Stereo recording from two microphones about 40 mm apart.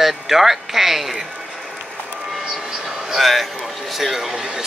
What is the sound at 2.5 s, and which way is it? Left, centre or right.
Speech, centre.